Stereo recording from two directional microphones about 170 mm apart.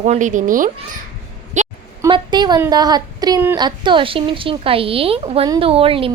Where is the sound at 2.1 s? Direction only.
25° right (ahead or behind).